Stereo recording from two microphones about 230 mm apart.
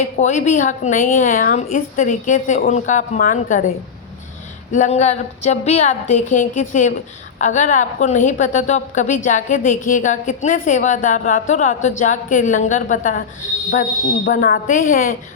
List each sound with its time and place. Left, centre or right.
0.0 s a woman's voice: left
4.7 s a woman's voice: left
14.3 s a woman's voice: left